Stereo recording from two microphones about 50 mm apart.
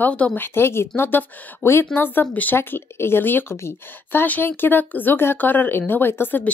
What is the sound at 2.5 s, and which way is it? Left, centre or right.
Speech, left.